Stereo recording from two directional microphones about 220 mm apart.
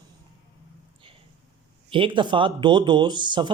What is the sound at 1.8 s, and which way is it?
A man's voice, 25° right (ahead or behind).